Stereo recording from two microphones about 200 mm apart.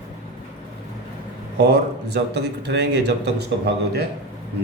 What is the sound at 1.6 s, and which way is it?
A man's voice, 55° right (ahead or behind).